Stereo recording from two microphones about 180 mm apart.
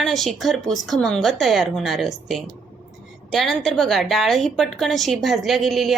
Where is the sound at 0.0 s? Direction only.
Centre (ahead or behind).